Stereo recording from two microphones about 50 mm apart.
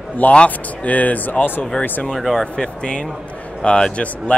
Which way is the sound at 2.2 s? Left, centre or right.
Centre.